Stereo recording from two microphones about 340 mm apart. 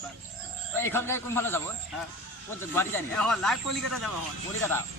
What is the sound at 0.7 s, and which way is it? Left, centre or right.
Speech, centre.